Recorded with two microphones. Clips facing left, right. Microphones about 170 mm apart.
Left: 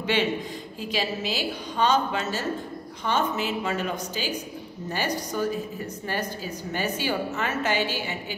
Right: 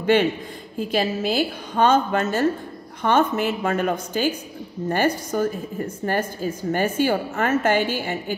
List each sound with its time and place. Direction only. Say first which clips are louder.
0.0 s a woman's voice: right 6 dB; 50° right (ahead or behind)